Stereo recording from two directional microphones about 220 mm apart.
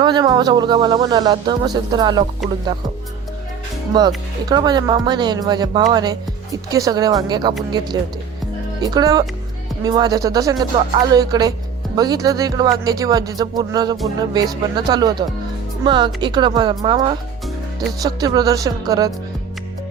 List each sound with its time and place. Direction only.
0.0 s speech: 20° right (ahead or behind)
3.9 s speech: 20° right (ahead or behind)
8.8 s speech: 15° right (ahead or behind)